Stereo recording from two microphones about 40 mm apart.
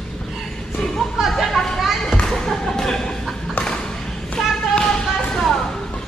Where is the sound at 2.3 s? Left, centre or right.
Centre.